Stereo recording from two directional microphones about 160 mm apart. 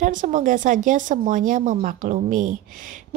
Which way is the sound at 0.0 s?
55° right (ahead or behind).